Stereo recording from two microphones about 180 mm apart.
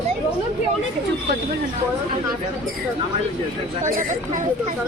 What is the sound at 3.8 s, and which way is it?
Speech, 45° right (ahead or behind).